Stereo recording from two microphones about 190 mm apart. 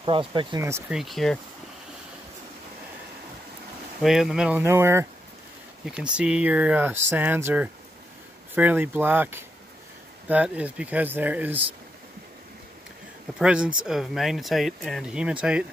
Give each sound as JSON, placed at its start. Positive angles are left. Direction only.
{"t": 0.0, "sound": "speech", "side_deg": -25}
{"t": 0.7, "sound": "speech", "side_deg": -15}
{"t": 0.9, "sound": "speech", "side_deg": 0}
{"t": 4.0, "sound": "speech", "side_deg": 0}
{"t": 13.4, "sound": "speech", "side_deg": -5}